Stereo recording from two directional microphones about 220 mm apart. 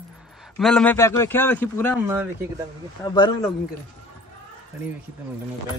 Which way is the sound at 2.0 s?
10° right (ahead or behind).